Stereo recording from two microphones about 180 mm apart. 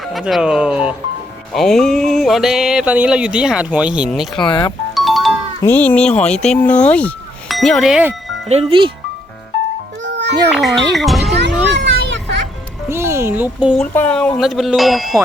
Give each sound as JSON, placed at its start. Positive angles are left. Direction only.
{"t": 0.0, "sound": "speech", "side_deg": 0}
{"t": 5.6, "sound": "speech", "side_deg": 10}
{"t": 8.4, "sound": "speech", "side_deg": -30}
{"t": 10.0, "sound": "music", "side_deg": -80}
{"t": 10.5, "sound": "speech", "side_deg": 0}
{"t": 11.7, "sound": "children playing", "side_deg": -75}
{"t": 12.9, "sound": "speech", "side_deg": -15}
{"t": 13.7, "sound": "speech", "side_deg": 5}